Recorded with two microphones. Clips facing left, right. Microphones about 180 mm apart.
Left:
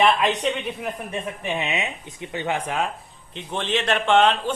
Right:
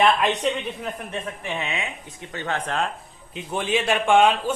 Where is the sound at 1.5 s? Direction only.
20° left (ahead or behind).